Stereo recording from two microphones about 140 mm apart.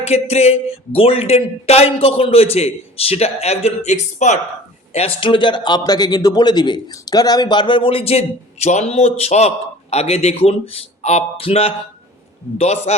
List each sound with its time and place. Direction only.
0.0 s speech: 50° left (ahead or behind)
4.9 s a man's voice: 40° left (ahead or behind)